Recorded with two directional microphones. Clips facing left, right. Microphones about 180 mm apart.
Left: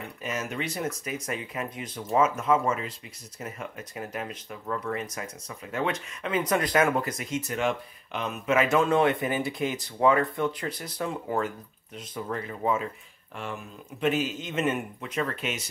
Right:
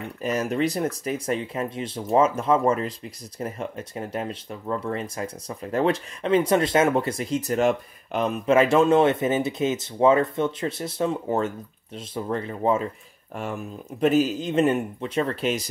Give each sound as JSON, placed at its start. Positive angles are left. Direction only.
{"t": 0.2, "sound": "speech", "side_deg": -35}
{"t": 8.5, "sound": "speech", "side_deg": -30}
{"t": 13.4, "sound": "speech", "side_deg": -40}